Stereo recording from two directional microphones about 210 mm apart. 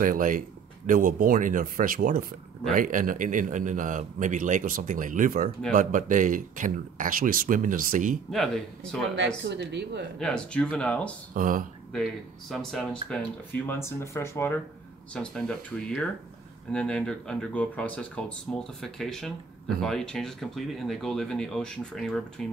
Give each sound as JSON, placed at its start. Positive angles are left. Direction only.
{"t": 0.0, "sound": "a man's voice", "side_deg": -40}
{"t": 8.3, "sound": "speech", "side_deg": 0}
{"t": 9.4, "sound": "speech", "side_deg": -55}
{"t": 10.1, "sound": "speech", "side_deg": 5}
{"t": 11.3, "sound": "a man's voice", "side_deg": -40}
{"t": 11.9, "sound": "speech", "side_deg": 0}